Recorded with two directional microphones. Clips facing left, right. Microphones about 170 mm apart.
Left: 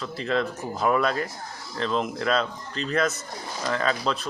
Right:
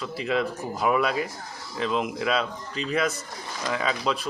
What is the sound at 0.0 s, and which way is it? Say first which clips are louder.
Speech: even; 5° right (ahead or behind).